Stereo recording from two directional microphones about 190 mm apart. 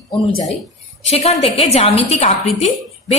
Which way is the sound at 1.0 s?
35° left (ahead or behind).